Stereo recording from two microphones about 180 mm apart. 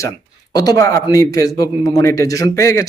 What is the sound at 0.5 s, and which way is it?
Speech, 20° left (ahead or behind).